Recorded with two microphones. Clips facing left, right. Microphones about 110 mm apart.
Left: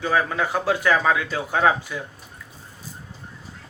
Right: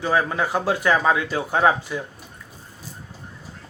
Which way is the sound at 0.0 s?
25° right (ahead or behind).